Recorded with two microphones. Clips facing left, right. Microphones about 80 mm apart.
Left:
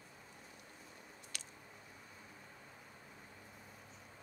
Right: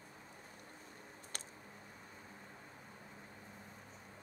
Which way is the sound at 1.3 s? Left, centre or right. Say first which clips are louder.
Right 3 dB; right.